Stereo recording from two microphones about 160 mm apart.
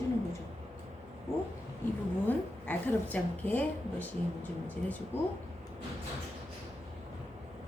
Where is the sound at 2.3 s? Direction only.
10° left (ahead or behind).